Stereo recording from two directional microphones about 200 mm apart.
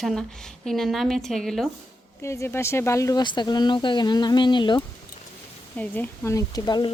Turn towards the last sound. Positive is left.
turn(degrees=20)  # may be behind; listen again after turning